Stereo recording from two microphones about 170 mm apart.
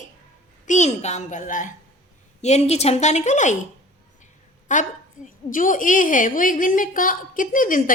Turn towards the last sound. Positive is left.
turn(degrees=55)  # may be behind; listen again after turning